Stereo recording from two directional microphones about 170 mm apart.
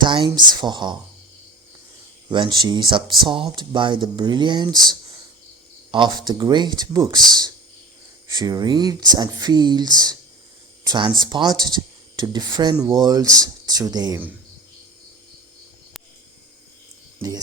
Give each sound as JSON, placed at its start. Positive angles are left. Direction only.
{"t": 0.0, "sound": "speech", "side_deg": -30}
{"t": 2.3, "sound": "speech", "side_deg": -25}
{"t": 5.9, "sound": "speech", "side_deg": -25}
{"t": 17.2, "sound": "speech", "side_deg": -20}